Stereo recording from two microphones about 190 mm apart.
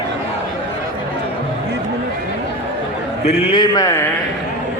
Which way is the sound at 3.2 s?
30° left (ahead or behind).